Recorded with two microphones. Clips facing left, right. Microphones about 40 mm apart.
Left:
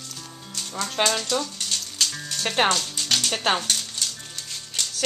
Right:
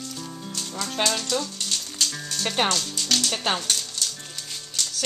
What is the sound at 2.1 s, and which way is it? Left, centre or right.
Sizzle, centre.